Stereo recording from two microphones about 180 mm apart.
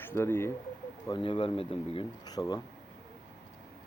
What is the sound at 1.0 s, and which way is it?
Speech, 25° left (ahead or behind).